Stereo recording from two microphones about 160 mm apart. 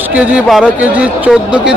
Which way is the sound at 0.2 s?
10° right (ahead or behind).